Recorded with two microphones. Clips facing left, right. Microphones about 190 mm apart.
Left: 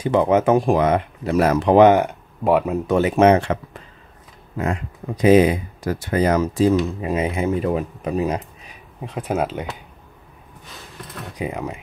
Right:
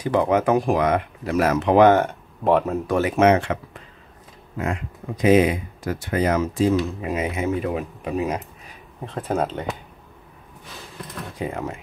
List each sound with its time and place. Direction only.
0.0 s speech: 25° left (ahead or behind)
1.8 s speech: 15° left (ahead or behind); by 3.5 s 35° left (ahead or behind)
5.2 s speech: 35° left (ahead or behind)
5.9 s speech: centre (ahead or behind)
6.2 s speech: 35° left (ahead or behind)
9.1 s speech: 5° left (ahead or behind)
11.3 s speech: 15° left (ahead or behind)